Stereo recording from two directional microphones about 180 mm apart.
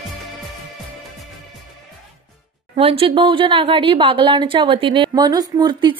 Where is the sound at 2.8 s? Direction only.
30° right (ahead or behind).